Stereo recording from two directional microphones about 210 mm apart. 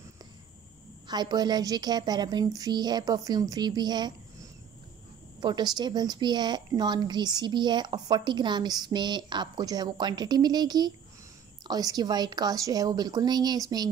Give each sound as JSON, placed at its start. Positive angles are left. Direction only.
{"t": 1.0, "sound": "a woman's voice", "side_deg": -20}